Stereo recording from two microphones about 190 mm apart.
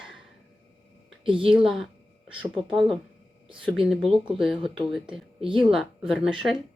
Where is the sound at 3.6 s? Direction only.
Centre (ahead or behind).